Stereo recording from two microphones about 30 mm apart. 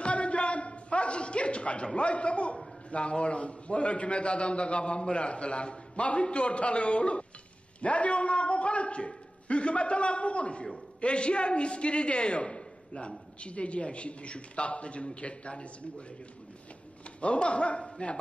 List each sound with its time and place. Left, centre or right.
0.0 s a sound: left
2.0 s a man's voice: left
17.2 s a man's voice: left